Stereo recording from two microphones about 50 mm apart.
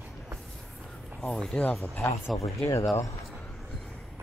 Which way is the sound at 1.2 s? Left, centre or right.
Centre.